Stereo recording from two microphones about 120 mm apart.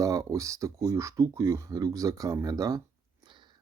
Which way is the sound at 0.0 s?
30° right (ahead or behind).